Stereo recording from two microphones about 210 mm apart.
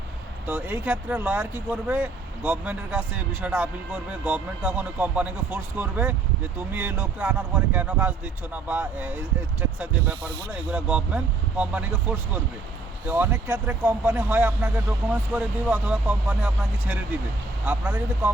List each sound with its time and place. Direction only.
0.4 s speech: 10° right (ahead or behind)